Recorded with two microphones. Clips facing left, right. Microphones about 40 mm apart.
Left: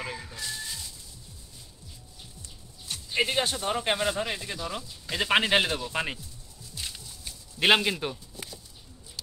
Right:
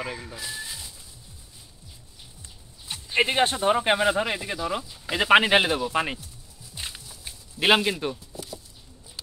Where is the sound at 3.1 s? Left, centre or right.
Right; by 6.2 s centre.